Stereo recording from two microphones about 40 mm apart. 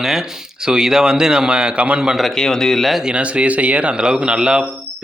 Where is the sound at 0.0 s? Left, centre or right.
Centre; by 2.0 s right.